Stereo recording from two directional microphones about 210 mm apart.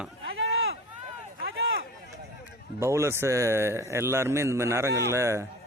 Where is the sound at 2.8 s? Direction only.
10° right (ahead or behind).